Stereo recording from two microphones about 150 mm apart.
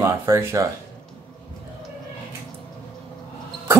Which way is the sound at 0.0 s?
15° right (ahead or behind).